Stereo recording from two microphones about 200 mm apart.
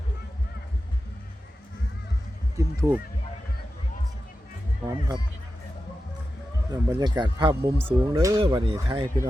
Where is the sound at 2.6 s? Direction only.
15° right (ahead or behind).